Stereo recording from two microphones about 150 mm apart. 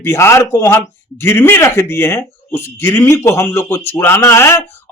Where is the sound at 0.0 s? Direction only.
15° left (ahead or behind).